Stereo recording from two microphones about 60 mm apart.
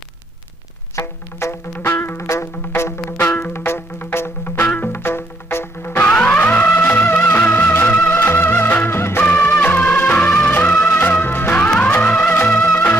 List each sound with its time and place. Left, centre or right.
0.9 s music: left
3.2 s music: left
4.5 s music: left
6.1 s music: left
9.2 s music: left
11.2 s music: left
11.7 s music: left